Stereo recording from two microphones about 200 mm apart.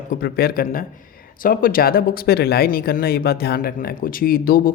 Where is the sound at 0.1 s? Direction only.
50° left (ahead or behind).